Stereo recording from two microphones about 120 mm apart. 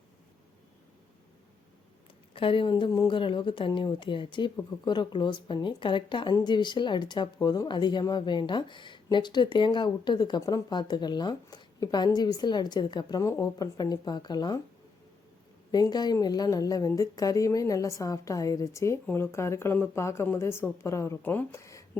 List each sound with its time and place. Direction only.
2.3 s speech: 50° left (ahead or behind)
15.7 s a woman's voice: 35° left (ahead or behind)